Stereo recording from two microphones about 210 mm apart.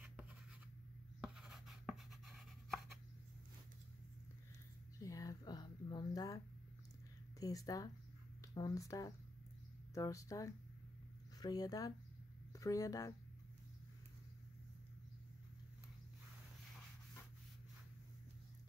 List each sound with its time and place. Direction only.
1.2 s writing: 5° right (ahead or behind)
4.9 s a sound: 15° left (ahead or behind)
7.3 s speech: 15° left (ahead or behind)